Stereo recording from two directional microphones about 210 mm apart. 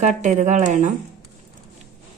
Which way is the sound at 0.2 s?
35° right (ahead or behind).